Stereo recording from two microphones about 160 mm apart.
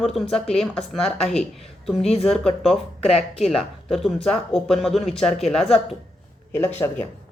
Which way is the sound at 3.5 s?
Centre (ahead or behind).